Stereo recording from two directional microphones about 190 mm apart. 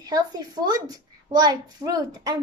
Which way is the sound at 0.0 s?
20° right (ahead or behind).